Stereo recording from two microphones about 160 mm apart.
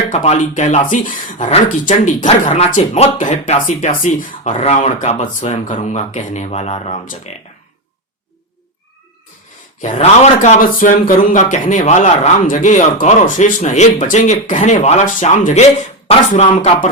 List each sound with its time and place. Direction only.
0.1 s speech: 45° left (ahead or behind)
9.8 s speech: 45° left (ahead or behind)